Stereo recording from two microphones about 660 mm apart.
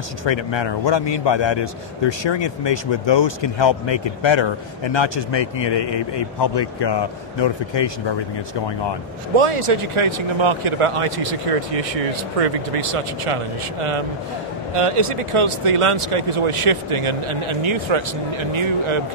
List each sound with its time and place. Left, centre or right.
0.2 s a man's voice: left
9.4 s speech: right